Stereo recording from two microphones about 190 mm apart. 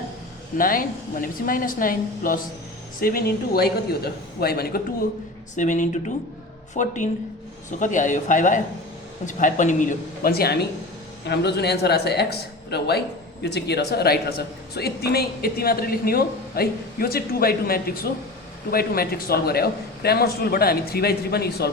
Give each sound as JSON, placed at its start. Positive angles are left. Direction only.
{"t": 0.5, "sound": "speech", "side_deg": 50}
{"t": 5.5, "sound": "a man's voice", "side_deg": 40}